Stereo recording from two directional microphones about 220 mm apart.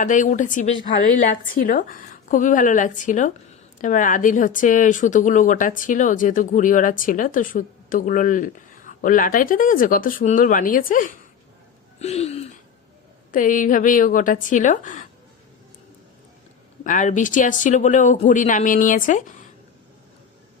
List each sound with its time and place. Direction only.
0.0 s speech: 35° left (ahead or behind)
11.9 s a sound: 30° left (ahead or behind)
13.3 s speech: 35° left (ahead or behind)
16.8 s speech: 35° left (ahead or behind)